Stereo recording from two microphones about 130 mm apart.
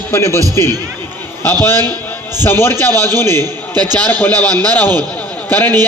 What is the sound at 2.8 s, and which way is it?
A man's voice, 30° right (ahead or behind).